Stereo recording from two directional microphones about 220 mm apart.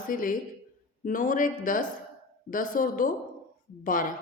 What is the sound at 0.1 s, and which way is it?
A woman's voice, 40° left (ahead or behind).